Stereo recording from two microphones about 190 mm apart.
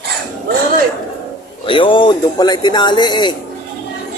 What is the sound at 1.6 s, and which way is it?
Speech, 25° left (ahead or behind).